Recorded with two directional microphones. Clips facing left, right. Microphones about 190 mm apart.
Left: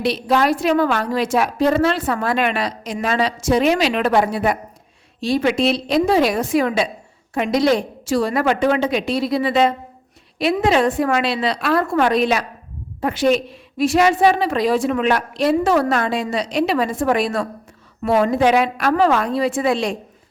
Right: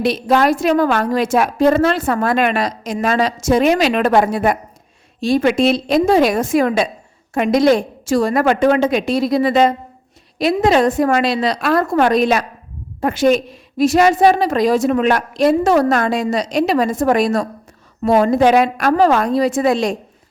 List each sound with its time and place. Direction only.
0.0 s a woman's voice: 45° right (ahead or behind)